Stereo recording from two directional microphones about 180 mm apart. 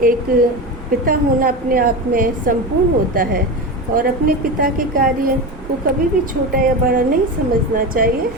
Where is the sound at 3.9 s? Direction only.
50° right (ahead or behind).